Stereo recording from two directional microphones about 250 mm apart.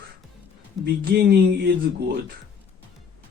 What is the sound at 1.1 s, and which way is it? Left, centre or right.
Speech, right.